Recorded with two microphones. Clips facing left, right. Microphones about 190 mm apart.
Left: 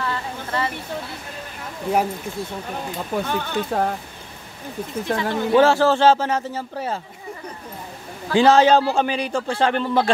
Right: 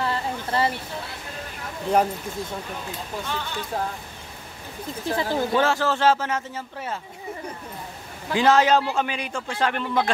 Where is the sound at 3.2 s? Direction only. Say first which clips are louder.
Left 8 dB; 55° left (ahead or behind).